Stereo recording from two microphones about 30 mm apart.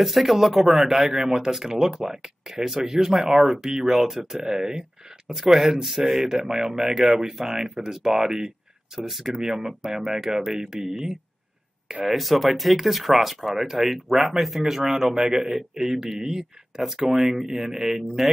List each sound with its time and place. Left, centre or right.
0.0 s speech: centre
12.1 s speech: centre